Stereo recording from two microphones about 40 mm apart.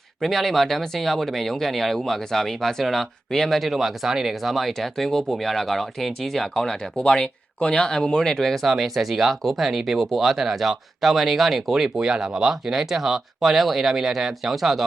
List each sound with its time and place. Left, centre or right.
0.2 s speech: centre
3.7 s speech: centre
4.4 s speech: centre
8.7 s speech: centre
11.9 s speech: right; by 14.8 s centre